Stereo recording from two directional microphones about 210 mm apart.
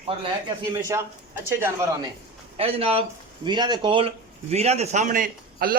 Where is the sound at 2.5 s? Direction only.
25° right (ahead or behind).